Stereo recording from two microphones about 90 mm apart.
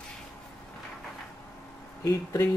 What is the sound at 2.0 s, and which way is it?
Speech, 35° left (ahead or behind).